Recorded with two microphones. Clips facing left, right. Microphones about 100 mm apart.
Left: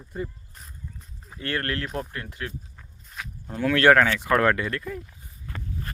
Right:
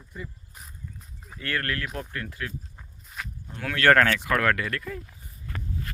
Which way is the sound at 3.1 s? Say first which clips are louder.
Even; 5° right (ahead or behind).